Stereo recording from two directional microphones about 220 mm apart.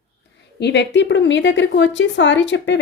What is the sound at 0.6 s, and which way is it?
Speech, 50° left (ahead or behind).